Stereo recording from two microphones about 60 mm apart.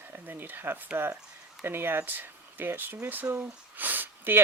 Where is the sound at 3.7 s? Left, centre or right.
Right.